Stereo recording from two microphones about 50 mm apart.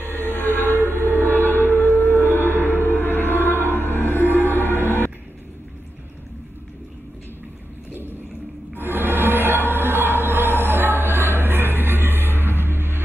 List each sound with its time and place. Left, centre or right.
0.0 s a sound: left
0.8 s music: left
8.7 s music: right